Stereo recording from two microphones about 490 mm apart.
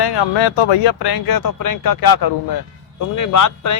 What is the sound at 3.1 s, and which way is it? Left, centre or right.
Speech, left.